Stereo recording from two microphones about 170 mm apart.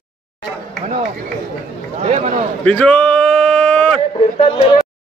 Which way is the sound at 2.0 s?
40° right (ahead or behind).